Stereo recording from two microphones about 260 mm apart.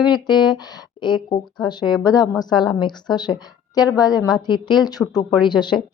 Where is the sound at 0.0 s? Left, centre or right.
Centre.